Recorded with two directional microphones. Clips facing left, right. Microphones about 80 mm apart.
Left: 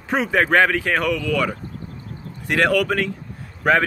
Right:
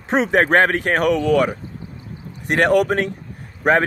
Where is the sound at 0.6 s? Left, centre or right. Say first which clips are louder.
Right 2 dB; right.